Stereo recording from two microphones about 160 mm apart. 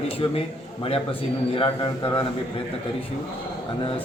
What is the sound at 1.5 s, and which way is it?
Speech, 30° left (ahead or behind).